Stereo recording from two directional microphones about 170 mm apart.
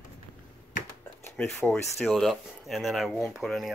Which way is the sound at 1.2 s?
15° left (ahead or behind).